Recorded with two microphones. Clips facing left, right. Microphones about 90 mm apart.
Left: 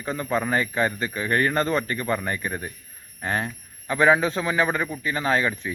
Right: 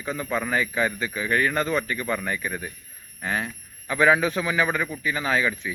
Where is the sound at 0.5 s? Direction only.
35° left (ahead or behind).